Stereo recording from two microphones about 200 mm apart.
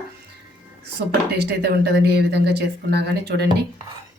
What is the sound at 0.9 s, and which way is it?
A woman's voice, 55° right (ahead or behind).